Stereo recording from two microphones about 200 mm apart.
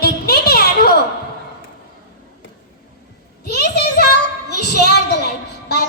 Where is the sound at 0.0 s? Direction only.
50° left (ahead or behind).